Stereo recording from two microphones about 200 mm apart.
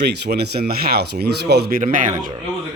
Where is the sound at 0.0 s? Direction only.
55° right (ahead or behind).